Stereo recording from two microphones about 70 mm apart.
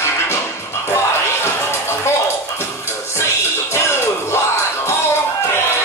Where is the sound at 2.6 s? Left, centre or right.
Left.